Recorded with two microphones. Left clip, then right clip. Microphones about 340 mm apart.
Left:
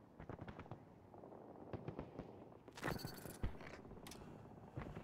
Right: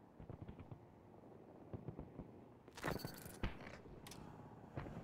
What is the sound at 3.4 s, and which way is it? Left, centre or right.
Mechanisms, right.